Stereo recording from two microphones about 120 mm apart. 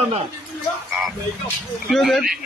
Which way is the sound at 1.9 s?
Centre (ahead or behind).